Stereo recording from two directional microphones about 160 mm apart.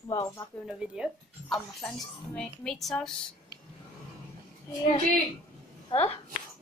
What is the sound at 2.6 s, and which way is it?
Speech, centre (ahead or behind).